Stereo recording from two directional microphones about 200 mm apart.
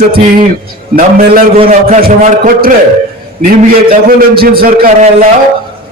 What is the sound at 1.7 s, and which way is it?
A man's voice, 45° right (ahead or behind).